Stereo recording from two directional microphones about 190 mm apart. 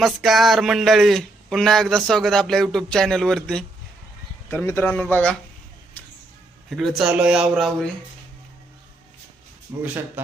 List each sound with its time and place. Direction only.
0.0 s a man's voice: centre (ahead or behind)
6.7 s speech: centre (ahead or behind)
9.7 s speech: 15° right (ahead or behind)